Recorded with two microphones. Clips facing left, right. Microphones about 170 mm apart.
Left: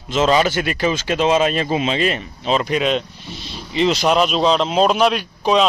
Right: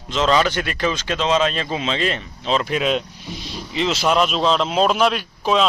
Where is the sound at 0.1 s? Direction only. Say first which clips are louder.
Left 2 dB; 10° left (ahead or behind).